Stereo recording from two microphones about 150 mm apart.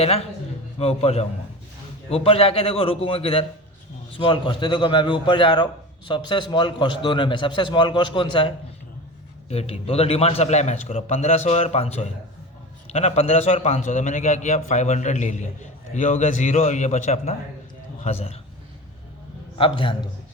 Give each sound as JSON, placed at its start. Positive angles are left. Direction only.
{"t": 0.0, "sound": "a man's voice", "side_deg": 40}
{"t": 19.5, "sound": "a man's voice", "side_deg": 35}